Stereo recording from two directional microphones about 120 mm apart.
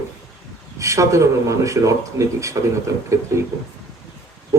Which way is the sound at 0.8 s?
25° right (ahead or behind).